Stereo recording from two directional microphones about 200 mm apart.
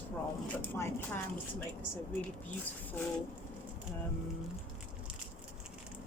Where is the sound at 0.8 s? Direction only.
10° left (ahead or behind).